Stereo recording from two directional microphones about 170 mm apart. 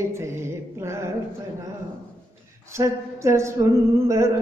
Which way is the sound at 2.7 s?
15° right (ahead or behind).